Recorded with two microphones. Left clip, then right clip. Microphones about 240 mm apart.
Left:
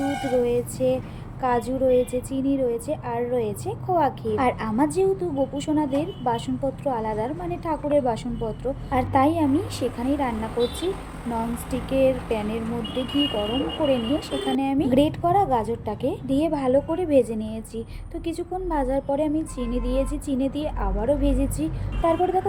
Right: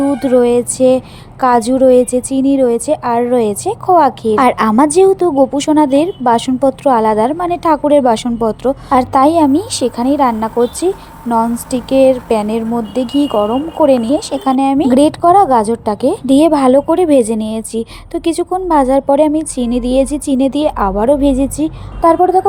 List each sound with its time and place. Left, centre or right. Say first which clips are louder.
0.4 s speech: right 12 dB; right